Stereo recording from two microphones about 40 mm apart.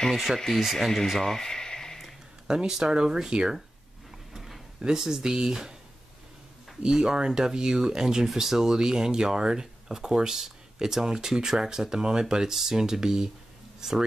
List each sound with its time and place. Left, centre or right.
0.1 s speech: centre
2.4 s speech: centre
4.3 s a sound: centre
4.8 s speech: centre
6.8 s speech: centre